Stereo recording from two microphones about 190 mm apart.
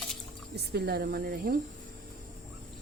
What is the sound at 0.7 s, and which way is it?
Speech, 55° right (ahead or behind).